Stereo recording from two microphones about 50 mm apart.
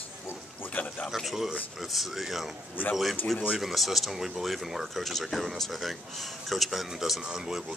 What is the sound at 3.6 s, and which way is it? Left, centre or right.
Speech, centre.